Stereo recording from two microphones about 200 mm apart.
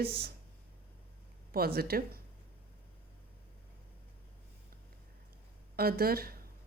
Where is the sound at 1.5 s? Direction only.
50° right (ahead or behind).